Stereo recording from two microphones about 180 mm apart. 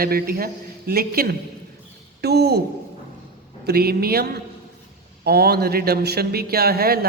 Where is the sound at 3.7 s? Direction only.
60° right (ahead or behind).